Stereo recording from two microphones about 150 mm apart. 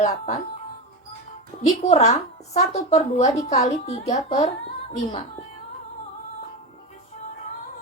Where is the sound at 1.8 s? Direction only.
45° left (ahead or behind).